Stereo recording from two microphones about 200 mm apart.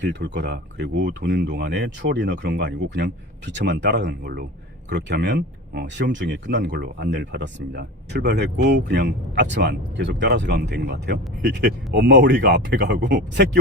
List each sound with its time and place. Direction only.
0.0 s speech: 60° right (ahead or behind)